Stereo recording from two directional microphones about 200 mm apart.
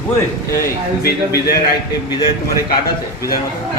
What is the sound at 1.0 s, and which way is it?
Speech, 50° left (ahead or behind).